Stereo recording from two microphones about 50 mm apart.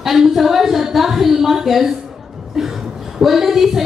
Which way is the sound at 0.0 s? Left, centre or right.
Centre.